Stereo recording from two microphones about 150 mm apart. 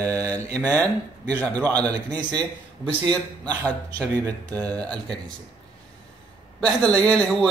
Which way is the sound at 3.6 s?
10° left (ahead or behind).